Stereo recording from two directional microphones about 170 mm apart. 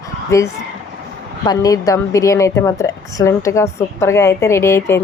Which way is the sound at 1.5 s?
20° left (ahead or behind).